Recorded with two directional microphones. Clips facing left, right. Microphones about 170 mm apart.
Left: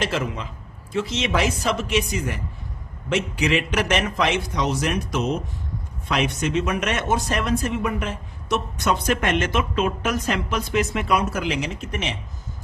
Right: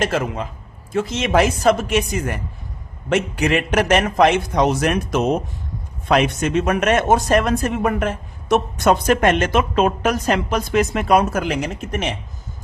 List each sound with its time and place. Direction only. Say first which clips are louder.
0.0 s a woman's voice: right 4 dB; 50° right (ahead or behind)